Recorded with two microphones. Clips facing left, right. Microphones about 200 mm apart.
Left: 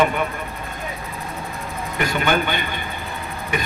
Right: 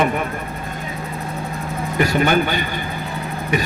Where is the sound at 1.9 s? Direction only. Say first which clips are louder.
Right 4 dB; 40° right (ahead or behind).